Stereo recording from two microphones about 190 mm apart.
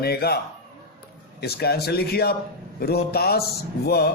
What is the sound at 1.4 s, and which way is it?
Speech, 55° left (ahead or behind).